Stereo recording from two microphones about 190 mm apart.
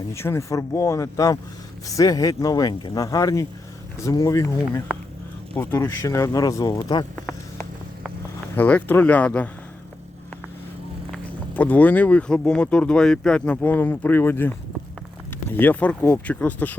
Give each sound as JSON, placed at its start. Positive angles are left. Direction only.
{"t": 0.1, "sound": "speech", "side_deg": 15}
{"t": 11.1, "sound": "speech", "side_deg": 10}
{"t": 15.5, "sound": "speech", "side_deg": 10}